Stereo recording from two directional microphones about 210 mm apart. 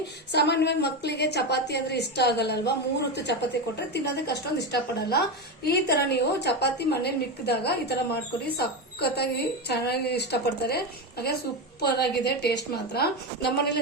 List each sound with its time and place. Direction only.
0.0 s a woman's voice: 55° left (ahead or behind)